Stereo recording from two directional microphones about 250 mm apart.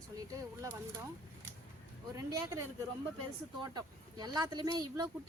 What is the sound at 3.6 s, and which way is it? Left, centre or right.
A woman's voice, centre.